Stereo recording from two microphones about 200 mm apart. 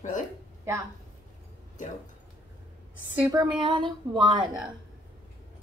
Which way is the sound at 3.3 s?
20° right (ahead or behind).